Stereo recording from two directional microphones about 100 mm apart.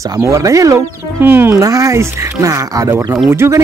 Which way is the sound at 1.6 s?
35° right (ahead or behind).